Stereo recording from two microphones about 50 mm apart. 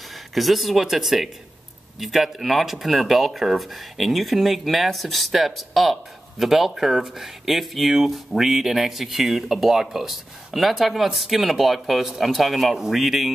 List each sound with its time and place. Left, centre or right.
0.3 s speech: centre